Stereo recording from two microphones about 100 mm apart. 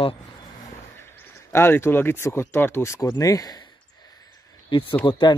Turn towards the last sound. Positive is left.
turn(degrees=50)  # may be behind; listen again after turning